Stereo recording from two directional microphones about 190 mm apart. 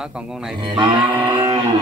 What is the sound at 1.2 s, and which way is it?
Guitar, 20° right (ahead or behind).